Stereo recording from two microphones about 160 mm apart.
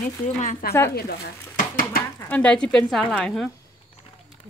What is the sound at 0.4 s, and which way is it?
Speech, 55° left (ahead or behind).